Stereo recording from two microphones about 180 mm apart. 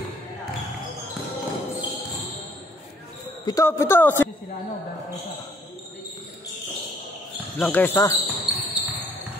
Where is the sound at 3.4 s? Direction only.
20° left (ahead or behind).